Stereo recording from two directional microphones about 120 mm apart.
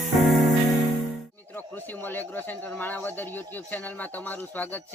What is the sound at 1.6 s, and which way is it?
Speech, 15° left (ahead or behind).